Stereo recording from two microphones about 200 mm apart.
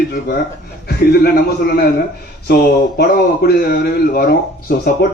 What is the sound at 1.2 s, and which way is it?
A man's voice, 50° left (ahead or behind).